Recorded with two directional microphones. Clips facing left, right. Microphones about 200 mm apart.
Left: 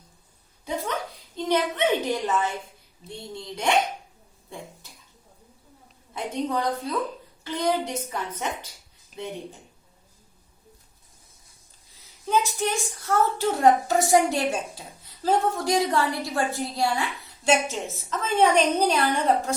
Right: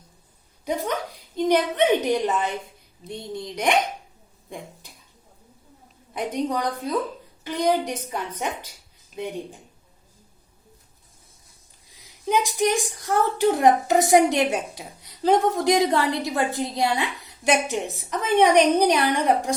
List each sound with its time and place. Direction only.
1.4 s a woman's voice: 15° right (ahead or behind)
4.4 s cough: 15° right (ahead or behind)
6.1 s a woman's voice: 15° right (ahead or behind)
9.1 s speech: centre (ahead or behind)
12.2 s a woman's voice: 15° right (ahead or behind)